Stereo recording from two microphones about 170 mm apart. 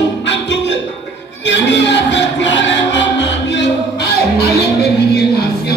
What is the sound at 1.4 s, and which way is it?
Music, 90° left.